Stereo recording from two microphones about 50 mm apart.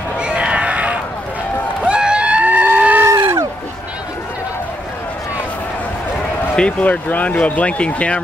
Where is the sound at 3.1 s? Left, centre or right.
Right.